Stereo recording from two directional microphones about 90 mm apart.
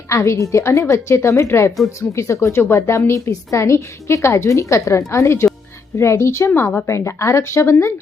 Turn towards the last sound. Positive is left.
turn(degrees=30)  # may be behind; listen again after turning